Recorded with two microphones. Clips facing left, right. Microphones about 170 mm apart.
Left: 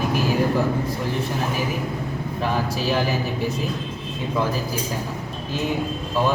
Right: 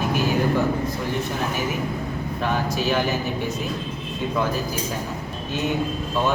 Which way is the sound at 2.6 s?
35° left (ahead or behind).